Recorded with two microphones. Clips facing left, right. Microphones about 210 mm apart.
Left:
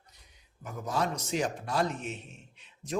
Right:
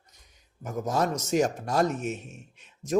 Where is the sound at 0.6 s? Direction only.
45° right (ahead or behind).